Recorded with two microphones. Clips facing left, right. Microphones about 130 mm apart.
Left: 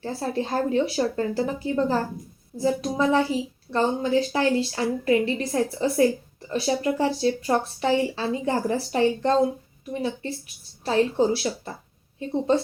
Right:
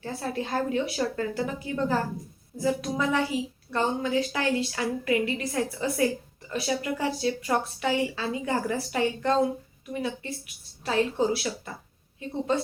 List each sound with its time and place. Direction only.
0.0 s a woman's voice: 30° left (ahead or behind)